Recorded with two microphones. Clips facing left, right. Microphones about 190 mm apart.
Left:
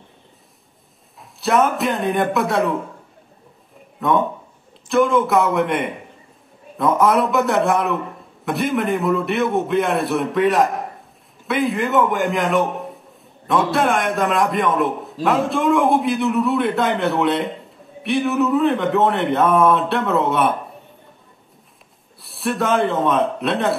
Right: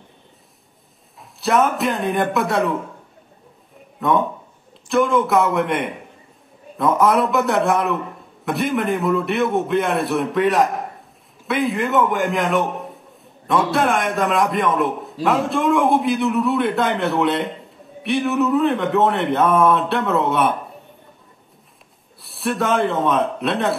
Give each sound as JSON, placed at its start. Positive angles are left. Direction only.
{"t": 1.4, "sound": "a man's voice", "side_deg": 0}
{"t": 4.0, "sound": "a man's voice", "side_deg": 0}
{"t": 22.2, "sound": "a man's voice", "side_deg": 0}